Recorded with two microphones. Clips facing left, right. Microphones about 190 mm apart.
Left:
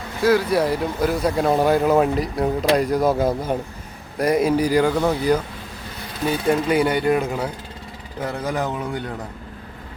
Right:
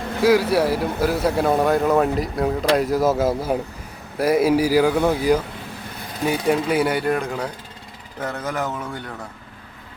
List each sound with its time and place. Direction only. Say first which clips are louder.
0.2 s a man's voice: right 1 dB; 10° right (ahead or behind); by 9.0 s 15° left (ahead or behind)